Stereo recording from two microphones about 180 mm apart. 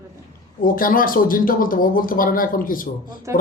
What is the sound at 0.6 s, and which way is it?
Speech, 50° left (ahead or behind).